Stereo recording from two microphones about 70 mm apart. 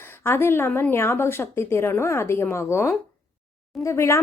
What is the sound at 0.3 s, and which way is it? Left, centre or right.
Speech, left.